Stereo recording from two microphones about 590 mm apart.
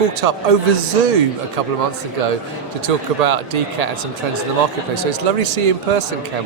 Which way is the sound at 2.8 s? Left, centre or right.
Right.